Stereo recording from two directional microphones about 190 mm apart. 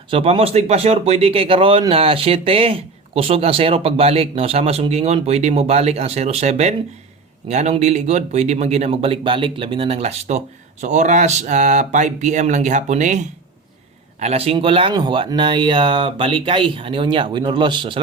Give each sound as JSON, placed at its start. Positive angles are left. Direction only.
{"t": 0.1, "sound": "speech", "side_deg": -30}